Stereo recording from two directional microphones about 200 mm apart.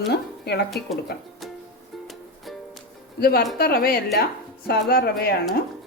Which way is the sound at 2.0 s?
Centre (ahead or behind).